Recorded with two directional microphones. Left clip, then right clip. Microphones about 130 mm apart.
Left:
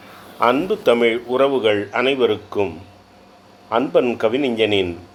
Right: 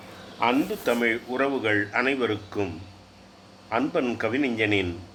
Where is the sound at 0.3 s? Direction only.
55° left (ahead or behind).